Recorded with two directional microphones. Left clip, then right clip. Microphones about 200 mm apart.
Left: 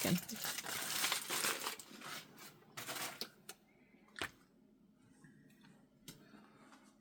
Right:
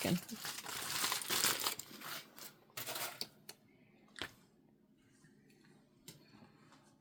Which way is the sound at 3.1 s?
10° right (ahead or behind).